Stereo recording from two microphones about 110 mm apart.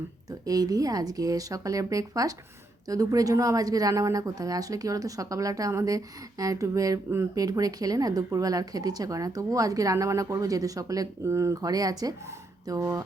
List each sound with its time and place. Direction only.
0.3 s speech: 35° right (ahead or behind)